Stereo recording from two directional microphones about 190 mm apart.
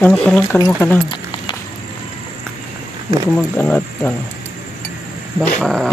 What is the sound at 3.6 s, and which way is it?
Speech, 10° left (ahead or behind).